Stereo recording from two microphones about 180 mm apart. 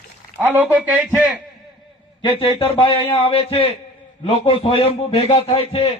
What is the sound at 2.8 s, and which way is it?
A man's voice, 30° left (ahead or behind).